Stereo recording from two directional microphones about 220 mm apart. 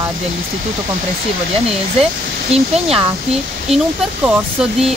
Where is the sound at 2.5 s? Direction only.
25° right (ahead or behind).